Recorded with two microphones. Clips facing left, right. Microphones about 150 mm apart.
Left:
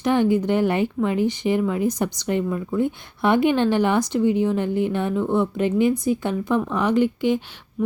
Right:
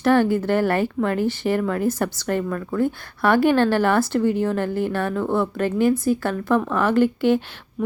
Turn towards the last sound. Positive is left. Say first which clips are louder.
# right 2 dB
turn(degrees=15)  # may be behind; listen again after turning